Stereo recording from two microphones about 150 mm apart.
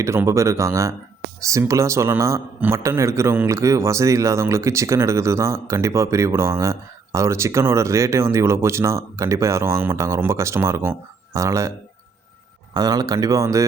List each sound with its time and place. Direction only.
0.0 s a man's voice: 20° right (ahead or behind)
12.7 s a man's voice: 25° right (ahead or behind)